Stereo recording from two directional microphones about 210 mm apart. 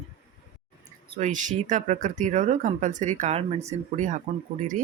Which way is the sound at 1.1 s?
35° right (ahead or behind).